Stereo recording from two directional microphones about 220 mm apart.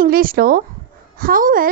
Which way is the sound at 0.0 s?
40° right (ahead or behind).